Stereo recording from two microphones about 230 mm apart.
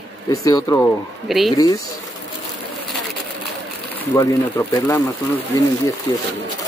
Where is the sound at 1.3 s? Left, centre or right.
Centre.